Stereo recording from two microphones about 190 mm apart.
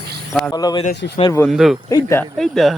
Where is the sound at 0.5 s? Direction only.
20° left (ahead or behind).